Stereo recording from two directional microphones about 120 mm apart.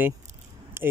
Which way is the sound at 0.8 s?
20° right (ahead or behind).